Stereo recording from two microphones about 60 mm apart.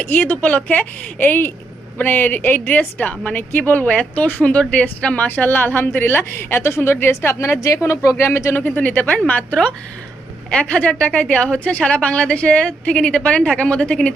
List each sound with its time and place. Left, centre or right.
0.0 s a woman's voice: left
8.6 s a woman's voice: left
10.6 s a woman's voice: left